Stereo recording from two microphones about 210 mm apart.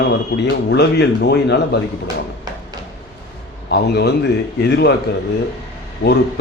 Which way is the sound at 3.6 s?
50° left (ahead or behind).